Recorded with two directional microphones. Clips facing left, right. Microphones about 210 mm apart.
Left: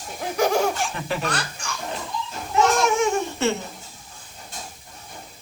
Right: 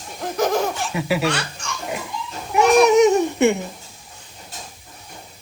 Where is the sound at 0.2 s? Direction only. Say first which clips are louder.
Right 1 dB; 10° left (ahead or behind).